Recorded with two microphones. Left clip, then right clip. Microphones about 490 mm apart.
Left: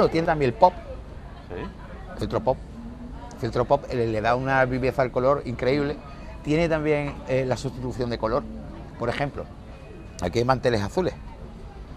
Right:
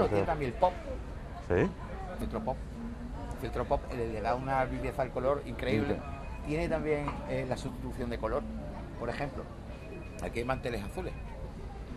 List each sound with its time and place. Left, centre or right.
0.1 s speech: left
1.5 s speech: right
3.4 s speech: left